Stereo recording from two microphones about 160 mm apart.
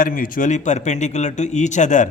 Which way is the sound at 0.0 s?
55° left (ahead or behind).